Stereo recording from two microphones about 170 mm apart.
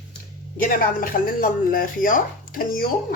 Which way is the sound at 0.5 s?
55° left (ahead or behind).